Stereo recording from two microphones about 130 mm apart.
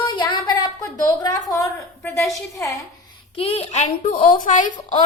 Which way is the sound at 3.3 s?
50° left (ahead or behind).